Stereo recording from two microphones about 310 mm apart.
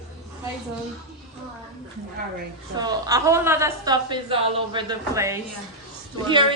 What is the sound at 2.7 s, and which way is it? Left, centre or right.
A woman's voice, centre.